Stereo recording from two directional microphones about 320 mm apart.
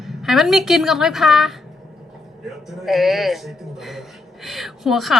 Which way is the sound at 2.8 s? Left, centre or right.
Centre.